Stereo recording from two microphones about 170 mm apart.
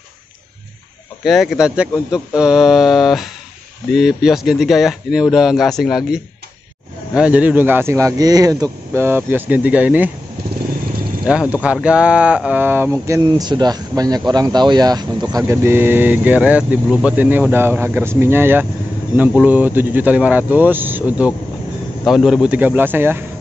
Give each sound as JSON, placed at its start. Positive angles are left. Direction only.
{"t": 1.2, "sound": "speech", "side_deg": 0}
{"t": 11.2, "sound": "speech", "side_deg": -5}